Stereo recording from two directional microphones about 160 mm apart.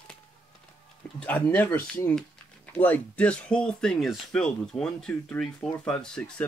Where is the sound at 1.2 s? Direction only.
10° left (ahead or behind).